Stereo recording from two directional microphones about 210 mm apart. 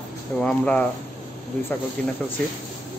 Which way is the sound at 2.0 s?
5° left (ahead or behind).